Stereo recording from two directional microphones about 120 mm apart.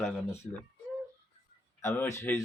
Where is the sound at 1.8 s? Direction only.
25° left (ahead or behind).